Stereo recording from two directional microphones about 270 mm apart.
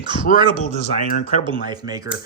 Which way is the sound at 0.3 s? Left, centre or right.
Right.